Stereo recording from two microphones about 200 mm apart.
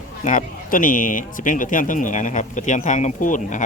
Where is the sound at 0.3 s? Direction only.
40° left (ahead or behind).